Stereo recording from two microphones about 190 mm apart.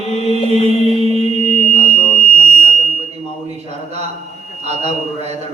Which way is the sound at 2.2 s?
35° right (ahead or behind).